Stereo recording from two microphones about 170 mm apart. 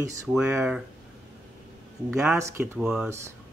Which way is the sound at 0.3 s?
10° right (ahead or behind).